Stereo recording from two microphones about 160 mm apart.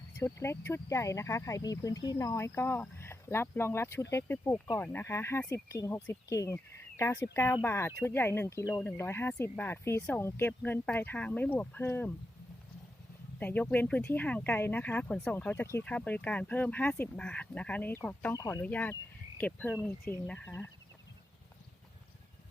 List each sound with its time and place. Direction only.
0.2 s speech: 15° left (ahead or behind)
13.4 s speech: 10° left (ahead or behind)